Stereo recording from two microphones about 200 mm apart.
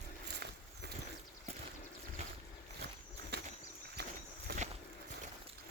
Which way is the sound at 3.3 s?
55° right (ahead or behind).